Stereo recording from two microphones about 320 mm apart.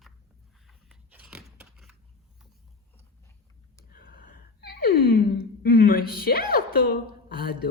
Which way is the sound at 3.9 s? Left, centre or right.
Left.